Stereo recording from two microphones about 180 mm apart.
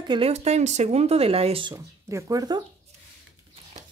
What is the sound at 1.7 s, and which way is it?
Speech, 20° right (ahead or behind).